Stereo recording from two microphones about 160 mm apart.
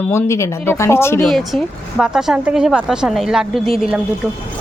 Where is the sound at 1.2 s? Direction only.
Centre (ahead or behind).